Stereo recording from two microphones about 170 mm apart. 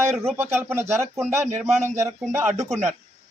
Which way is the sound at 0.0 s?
15° right (ahead or behind).